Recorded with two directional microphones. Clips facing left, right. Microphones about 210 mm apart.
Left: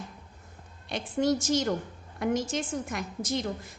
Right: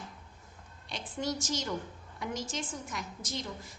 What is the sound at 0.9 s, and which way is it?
A woman's voice, 55° left (ahead or behind).